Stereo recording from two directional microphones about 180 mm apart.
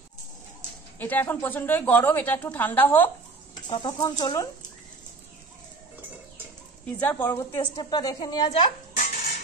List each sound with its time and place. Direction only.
0.9 s speech: 10° left (ahead or behind)
3.7 s a woman's voice: 25° left (ahead or behind)
7.0 s a woman's voice: 10° left (ahead or behind)
8.5 s music: 35° left (ahead or behind)